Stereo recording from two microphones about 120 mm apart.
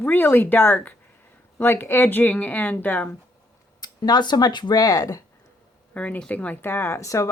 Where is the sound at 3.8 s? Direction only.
35° left (ahead or behind).